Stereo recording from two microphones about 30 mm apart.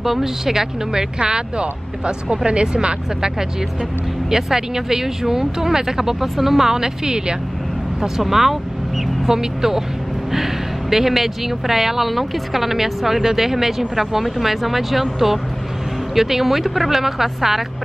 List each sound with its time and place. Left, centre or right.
0.0 s speech: centre
1.2 s speech: right
4.3 s speech: centre
6.2 s speech: centre
6.8 s speech: right
8.2 s speech: centre